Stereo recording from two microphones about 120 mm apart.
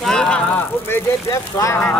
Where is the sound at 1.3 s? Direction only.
25° left (ahead or behind).